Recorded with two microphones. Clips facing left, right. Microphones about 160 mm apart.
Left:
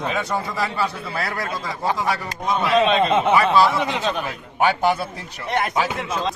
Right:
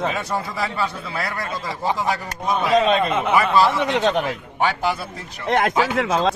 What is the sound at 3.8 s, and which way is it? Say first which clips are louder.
Speech: right 4 dB; 65° right (ahead or behind).